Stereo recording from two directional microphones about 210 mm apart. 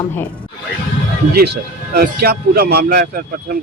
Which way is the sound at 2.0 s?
50° right (ahead or behind).